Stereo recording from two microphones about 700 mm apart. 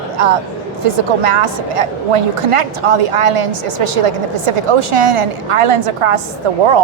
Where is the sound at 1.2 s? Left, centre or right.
Right.